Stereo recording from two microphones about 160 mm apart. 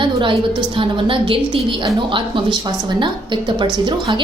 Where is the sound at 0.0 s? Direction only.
30° right (ahead or behind).